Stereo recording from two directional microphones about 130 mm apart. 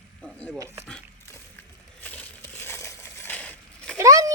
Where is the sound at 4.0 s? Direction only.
25° right (ahead or behind).